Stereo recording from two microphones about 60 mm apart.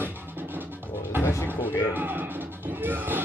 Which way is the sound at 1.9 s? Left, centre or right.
Right.